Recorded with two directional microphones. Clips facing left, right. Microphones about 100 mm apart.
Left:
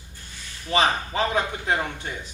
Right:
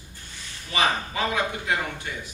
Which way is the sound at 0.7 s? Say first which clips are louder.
Left 3 dB; 30° left (ahead or behind).